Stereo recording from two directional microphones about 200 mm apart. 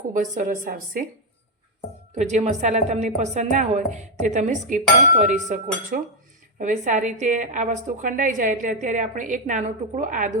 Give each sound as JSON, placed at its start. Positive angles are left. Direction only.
{"t": 0.1, "sound": "a woman's voice", "side_deg": -40}
{"t": 2.1, "sound": "a woman's voice", "side_deg": -35}